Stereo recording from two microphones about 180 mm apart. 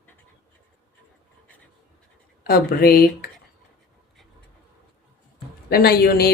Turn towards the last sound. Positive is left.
turn(degrees=60)  # may be behind; listen again after turning